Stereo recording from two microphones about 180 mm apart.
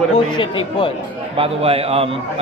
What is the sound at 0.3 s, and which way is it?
Speech, 25° left (ahead or behind).